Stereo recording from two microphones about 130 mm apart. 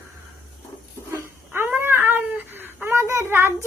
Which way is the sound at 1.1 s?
15° right (ahead or behind).